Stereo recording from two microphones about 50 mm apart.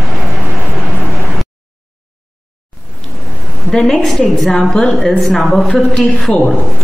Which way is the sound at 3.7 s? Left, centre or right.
Centre.